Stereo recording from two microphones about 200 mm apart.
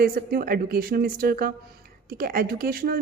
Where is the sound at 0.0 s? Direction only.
50° right (ahead or behind).